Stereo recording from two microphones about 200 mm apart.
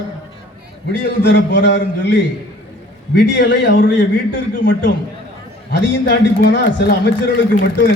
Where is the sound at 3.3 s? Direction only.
65° left (ahead or behind).